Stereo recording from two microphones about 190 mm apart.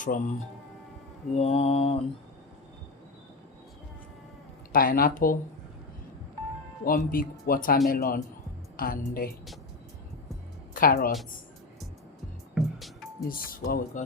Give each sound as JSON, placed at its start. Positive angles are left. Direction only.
{"t": 0.1, "sound": "speech", "side_deg": 45}
{"t": 1.3, "sound": "mantra", "side_deg": 35}
{"t": 4.7, "sound": "speech", "side_deg": 50}
{"t": 6.8, "sound": "a woman's voice", "side_deg": 50}
{"t": 10.8, "sound": "speech", "side_deg": 50}
{"t": 12.5, "sound": "music", "side_deg": 0}
{"t": 13.2, "sound": "speech", "side_deg": 50}